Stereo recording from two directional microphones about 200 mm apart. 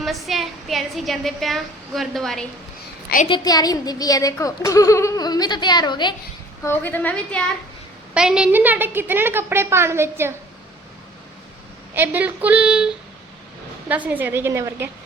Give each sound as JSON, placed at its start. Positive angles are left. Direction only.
{"t": 0.0, "sound": "a woman's voice", "side_deg": 0}
{"t": 3.2, "sound": "a child's voice", "side_deg": 20}
{"t": 6.7, "sound": "a woman's voice", "side_deg": 10}
{"t": 11.9, "sound": "a woman's voice", "side_deg": -10}